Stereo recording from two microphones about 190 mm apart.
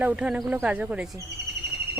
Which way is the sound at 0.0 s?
5° right (ahead or behind).